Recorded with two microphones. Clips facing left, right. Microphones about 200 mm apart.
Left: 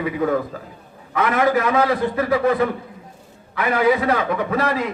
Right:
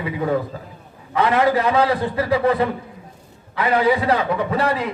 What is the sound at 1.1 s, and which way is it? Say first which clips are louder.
A man's voice: right 1 dB; 30° right (ahead or behind).